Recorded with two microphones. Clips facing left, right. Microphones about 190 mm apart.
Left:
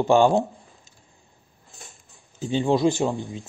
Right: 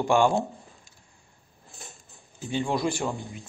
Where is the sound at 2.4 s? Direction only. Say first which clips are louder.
Left 6 dB; 25° left (ahead or behind).